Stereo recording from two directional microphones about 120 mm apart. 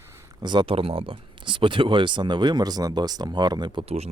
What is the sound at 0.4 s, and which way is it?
Speech, 45° right (ahead or behind).